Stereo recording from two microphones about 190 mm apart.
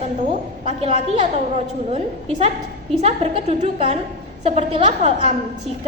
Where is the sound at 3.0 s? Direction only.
35° right (ahead or behind).